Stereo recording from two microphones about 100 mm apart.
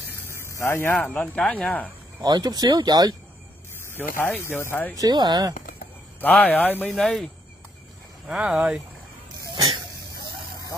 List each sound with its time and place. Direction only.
0.1 s vehicle: 20° left (ahead or behind)
0.5 s speech: 30° left (ahead or behind)
0.9 s speech: 15° left (ahead or behind)
2.2 s speech: 40° right (ahead or behind)
4.4 s speech: 25° left (ahead or behind)
4.9 s speech: 40° right (ahead or behind)
6.2 s speech: 15° left (ahead or behind)
6.9 s speech: centre (ahead or behind)
8.3 s speech: 10° right (ahead or behind)